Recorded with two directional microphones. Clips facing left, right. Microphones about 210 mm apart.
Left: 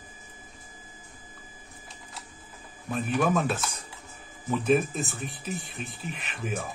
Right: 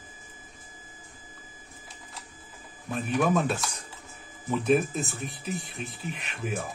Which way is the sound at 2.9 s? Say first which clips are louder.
Even; centre (ahead or behind).